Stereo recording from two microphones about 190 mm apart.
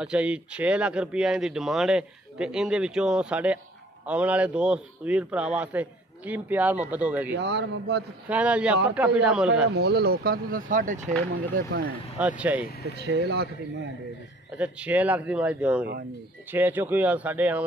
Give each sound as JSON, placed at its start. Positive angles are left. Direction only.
{"t": 0.0, "sound": "speech", "side_deg": -5}
{"t": 7.3, "sound": "speech", "side_deg": -65}
{"t": 8.3, "sound": "speech", "side_deg": -5}
{"t": 9.8, "sound": "speech", "side_deg": -60}
{"t": 12.2, "sound": "speech", "side_deg": -5}
{"t": 12.8, "sound": "speech", "side_deg": -60}
{"t": 14.5, "sound": "speech", "side_deg": -5}